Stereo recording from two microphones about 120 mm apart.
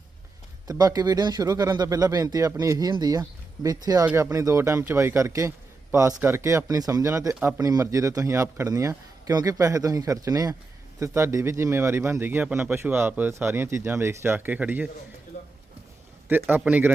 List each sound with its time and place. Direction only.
0.7 s speech: 30° right (ahead or behind); by 14.8 s 15° right (ahead or behind)
15.3 s a sound: 70° left (ahead or behind)
16.3 s speech: 15° right (ahead or behind)